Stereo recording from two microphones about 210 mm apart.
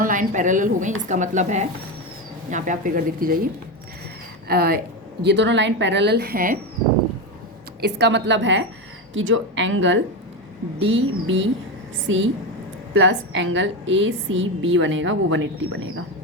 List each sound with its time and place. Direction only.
0.0 s speech: 40° right (ahead or behind)
4.4 s a woman's voice: 45° right (ahead or behind)
7.8 s a woman's voice: 55° right (ahead or behind)